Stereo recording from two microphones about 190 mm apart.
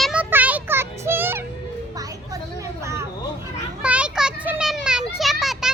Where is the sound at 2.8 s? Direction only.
15° right (ahead or behind).